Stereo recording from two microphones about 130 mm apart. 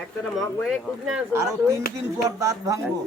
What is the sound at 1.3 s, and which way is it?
Speech, 20° right (ahead or behind).